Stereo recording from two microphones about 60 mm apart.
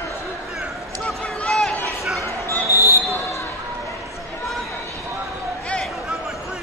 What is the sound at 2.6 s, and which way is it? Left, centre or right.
Basketball bounce, right.